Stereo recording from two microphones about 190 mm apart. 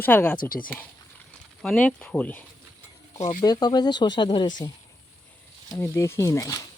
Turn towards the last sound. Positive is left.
turn(degrees=20)  # may be behind; listen again after turning